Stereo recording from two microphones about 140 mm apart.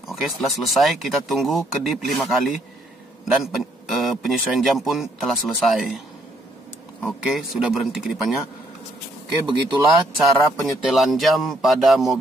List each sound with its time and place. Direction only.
0.0 s speech: centre (ahead or behind)
9.7 s speech: 30° right (ahead or behind)
10.6 s speech: centre (ahead or behind)